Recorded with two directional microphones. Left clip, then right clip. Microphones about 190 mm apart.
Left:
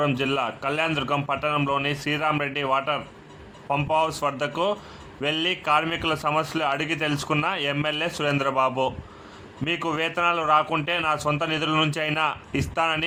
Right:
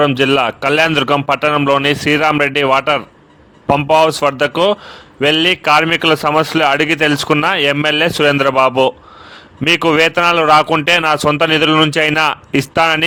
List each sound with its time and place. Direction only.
0.0 s a man's voice: 45° right (ahead or behind)